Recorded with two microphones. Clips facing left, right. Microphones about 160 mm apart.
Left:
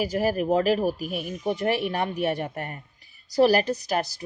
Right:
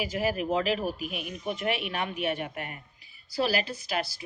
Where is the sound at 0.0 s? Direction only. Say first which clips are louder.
Left 5 dB; 40° left (ahead or behind).